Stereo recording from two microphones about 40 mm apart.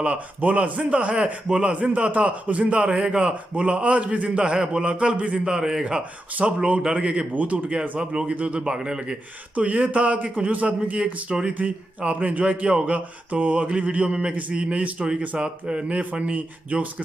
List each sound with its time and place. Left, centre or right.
0.0 s a man's voice: right
2.9 s a man's voice: right
6.4 s a man's voice: right
8.0 s a man's voice: right
9.6 s a man's voice: right
11.2 s a man's voice: right
16.1 s a man's voice: right